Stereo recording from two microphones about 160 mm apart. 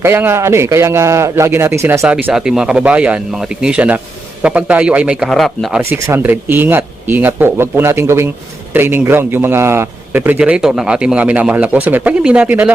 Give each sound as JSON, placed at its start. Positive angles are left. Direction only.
{"t": 0.0, "sound": "a man's voice", "side_deg": -15}
{"t": 5.9, "sound": "a man's voice", "side_deg": -15}